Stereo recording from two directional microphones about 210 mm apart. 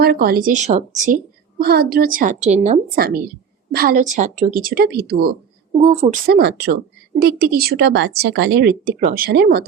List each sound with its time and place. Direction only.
0.0 s a woman's voice: 45° right (ahead or behind)
2.9 s speech: 45° right (ahead or behind)
5.8 s a woman's voice: 30° right (ahead or behind)
6.2 s speech: 45° right (ahead or behind)